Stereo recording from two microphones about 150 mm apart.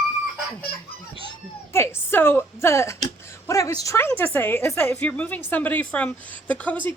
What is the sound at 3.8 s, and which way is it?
A woman's voice, 15° left (ahead or behind).